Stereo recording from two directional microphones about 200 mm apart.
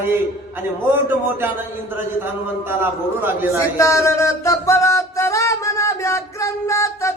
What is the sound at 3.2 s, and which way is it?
Speech, 10° right (ahead or behind).